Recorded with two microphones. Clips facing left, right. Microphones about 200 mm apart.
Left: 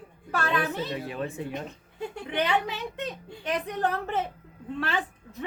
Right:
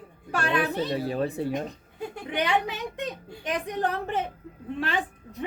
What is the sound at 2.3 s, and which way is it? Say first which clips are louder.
A woman's voice: right 1 dB; 15° right (ahead or behind).